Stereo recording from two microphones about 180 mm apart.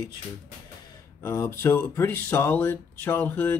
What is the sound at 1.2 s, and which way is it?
Speech, 15° left (ahead or behind).